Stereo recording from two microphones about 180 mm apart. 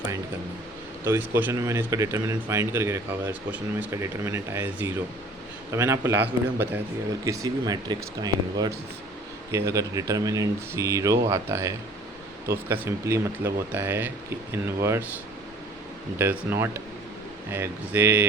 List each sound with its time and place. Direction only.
1.0 s speech: 10° right (ahead or behind)
16.1 s speech: 10° right (ahead or behind)